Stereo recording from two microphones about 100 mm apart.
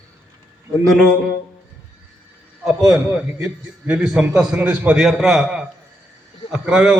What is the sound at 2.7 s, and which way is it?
A man's voice, 5° right (ahead or behind).